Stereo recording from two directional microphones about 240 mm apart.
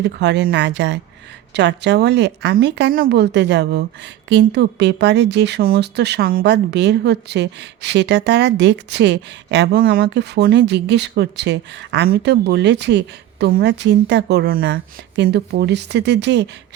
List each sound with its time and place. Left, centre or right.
0.0 s speech: right